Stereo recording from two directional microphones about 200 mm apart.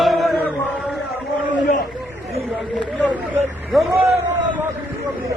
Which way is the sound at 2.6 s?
Centre (ahead or behind).